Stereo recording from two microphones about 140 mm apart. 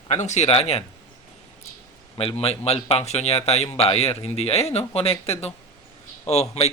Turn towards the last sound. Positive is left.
turn(degrees=50)  # may be behind; listen again after turning